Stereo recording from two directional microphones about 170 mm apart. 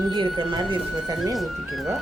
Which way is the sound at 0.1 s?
30° right (ahead or behind).